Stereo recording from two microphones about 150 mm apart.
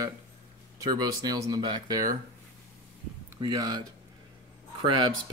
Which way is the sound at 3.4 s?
25° right (ahead or behind).